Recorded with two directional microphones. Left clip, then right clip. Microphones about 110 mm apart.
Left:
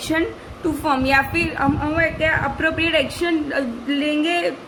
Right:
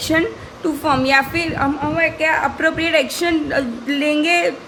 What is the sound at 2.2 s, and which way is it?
A woman's voice, 30° right (ahead or behind).